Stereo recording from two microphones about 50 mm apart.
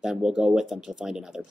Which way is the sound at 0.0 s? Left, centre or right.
Centre.